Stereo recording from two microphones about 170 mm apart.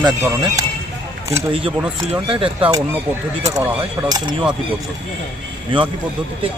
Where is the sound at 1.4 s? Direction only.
30° right (ahead or behind).